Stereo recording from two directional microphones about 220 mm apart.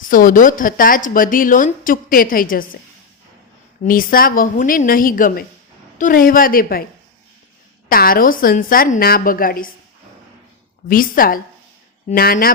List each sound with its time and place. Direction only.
0.0 s speech: 40° left (ahead or behind)
3.8 s speech: 40° left (ahead or behind)
7.9 s speech: 40° left (ahead or behind)
10.8 s speech: 40° left (ahead or behind)